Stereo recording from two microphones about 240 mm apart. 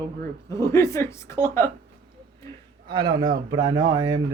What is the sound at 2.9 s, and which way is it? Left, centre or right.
A man's voice, centre.